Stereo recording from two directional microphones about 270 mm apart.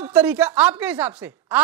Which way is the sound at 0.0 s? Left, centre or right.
Centre.